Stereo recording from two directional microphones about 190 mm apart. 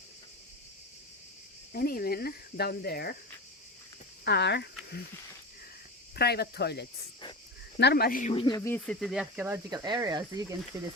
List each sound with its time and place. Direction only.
1.7 s speech: 50° left (ahead or behind)
4.2 s speech: 60° left (ahead or behind)
6.1 s speech: 55° left (ahead or behind)
8.3 s speech: 25° left (ahead or behind); by 10.9 s 15° right (ahead or behind)